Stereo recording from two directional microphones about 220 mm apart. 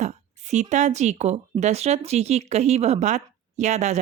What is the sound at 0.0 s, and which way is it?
Speech, 30° right (ahead or behind).